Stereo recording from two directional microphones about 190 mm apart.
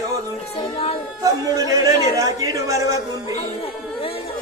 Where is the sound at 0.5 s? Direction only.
30° left (ahead or behind).